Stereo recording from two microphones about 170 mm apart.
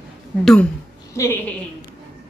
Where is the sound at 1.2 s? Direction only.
15° left (ahead or behind).